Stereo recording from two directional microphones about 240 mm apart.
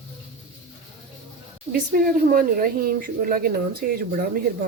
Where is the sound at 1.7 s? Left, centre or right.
Right.